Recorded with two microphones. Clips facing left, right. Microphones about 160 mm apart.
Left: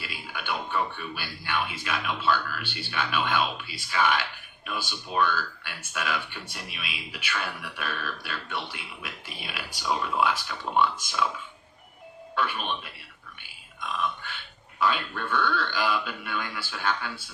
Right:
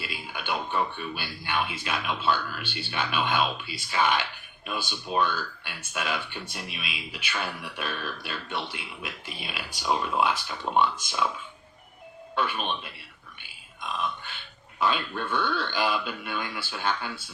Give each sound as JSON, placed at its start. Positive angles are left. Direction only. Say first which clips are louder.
{"t": 0.0, "sound": "speech", "louder": "right 1 dB", "side_deg": -20}
{"t": 12.3, "sound": "speech", "louder": "right 1 dB", "side_deg": -20}
{"t": 14.8, "sound": "speech", "louder": "even", "side_deg": -20}